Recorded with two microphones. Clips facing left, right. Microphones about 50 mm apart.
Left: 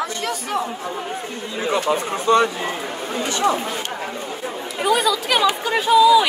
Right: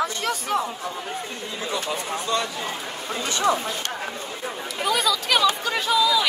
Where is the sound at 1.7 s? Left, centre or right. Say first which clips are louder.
Left 7 dB; left.